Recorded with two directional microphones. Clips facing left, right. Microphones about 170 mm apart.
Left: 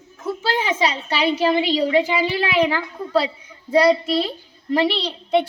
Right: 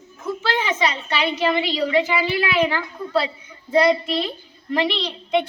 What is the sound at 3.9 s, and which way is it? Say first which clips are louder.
Speech: left 2 dB; 35° left (ahead or behind).